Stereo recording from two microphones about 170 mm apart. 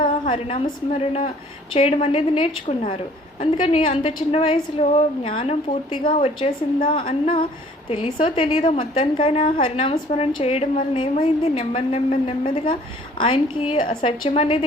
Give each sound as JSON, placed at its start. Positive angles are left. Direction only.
{"t": 0.3, "sound": "a woman's voice", "side_deg": 35}